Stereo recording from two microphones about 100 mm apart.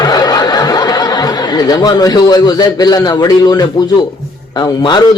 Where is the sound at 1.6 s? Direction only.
40° left (ahead or behind).